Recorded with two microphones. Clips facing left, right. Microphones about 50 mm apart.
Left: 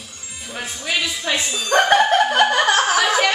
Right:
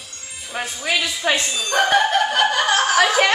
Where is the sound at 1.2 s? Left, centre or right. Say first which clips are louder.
Right 4 dB; right.